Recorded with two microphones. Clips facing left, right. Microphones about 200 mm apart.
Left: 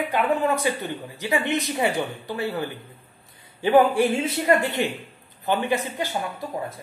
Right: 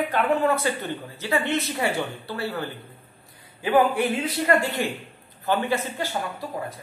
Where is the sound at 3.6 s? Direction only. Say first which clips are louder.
Left 3 dB; 30° left (ahead or behind).